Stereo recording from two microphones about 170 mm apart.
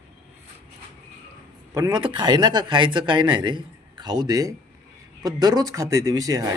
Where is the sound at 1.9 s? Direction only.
25° right (ahead or behind).